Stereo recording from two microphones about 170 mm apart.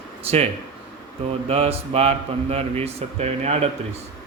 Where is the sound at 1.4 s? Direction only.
35° right (ahead or behind).